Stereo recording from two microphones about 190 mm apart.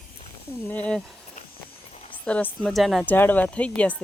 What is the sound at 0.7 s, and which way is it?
Speech, 5° left (ahead or behind).